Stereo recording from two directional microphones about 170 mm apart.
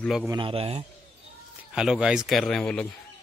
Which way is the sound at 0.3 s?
30° right (ahead or behind).